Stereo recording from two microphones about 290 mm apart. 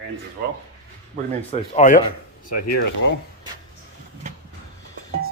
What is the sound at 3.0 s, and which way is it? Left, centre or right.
Speech, left.